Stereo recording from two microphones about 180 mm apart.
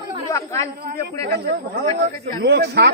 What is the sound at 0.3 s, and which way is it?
Speech, 15° left (ahead or behind).